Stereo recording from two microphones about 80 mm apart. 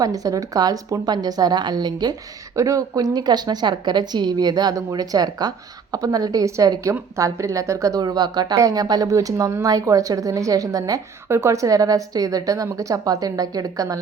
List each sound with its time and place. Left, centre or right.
0.0 s speech: right
1.0 s a woman's voice: right
2.6 s a woman's voice: right
11.3 s speech: right